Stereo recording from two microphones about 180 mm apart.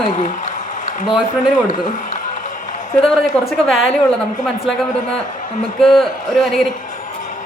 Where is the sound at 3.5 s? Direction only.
Centre (ahead or behind).